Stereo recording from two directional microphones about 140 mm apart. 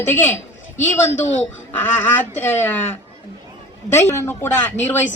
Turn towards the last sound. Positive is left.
turn(degrees=15)  # may be behind; listen again after turning